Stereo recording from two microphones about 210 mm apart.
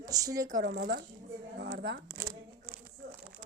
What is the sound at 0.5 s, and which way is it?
Speech, 50° right (ahead or behind).